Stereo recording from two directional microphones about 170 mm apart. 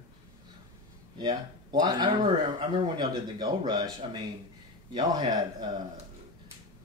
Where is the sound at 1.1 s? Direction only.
25° right (ahead or behind).